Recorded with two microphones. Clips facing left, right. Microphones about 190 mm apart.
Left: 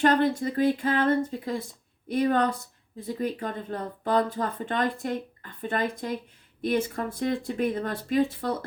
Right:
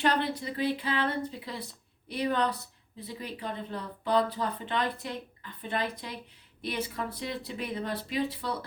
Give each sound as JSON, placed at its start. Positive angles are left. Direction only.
{"t": 0.0, "sound": "speech", "side_deg": 45}